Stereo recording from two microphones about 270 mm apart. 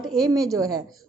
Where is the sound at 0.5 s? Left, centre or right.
Centre.